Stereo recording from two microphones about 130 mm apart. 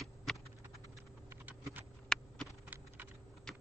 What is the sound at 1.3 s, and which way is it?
Computer keyboard, 15° right (ahead or behind).